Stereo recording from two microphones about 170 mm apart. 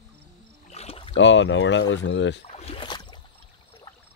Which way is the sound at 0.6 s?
35° left (ahead or behind).